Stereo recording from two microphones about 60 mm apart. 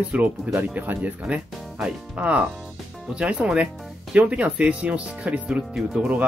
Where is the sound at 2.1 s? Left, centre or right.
Right.